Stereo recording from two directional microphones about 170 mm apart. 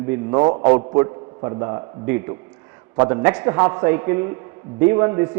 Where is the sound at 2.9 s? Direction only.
20° right (ahead or behind).